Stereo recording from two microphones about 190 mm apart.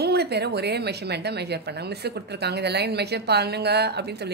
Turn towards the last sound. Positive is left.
turn(degrees=-60)  # may be behind; listen again after turning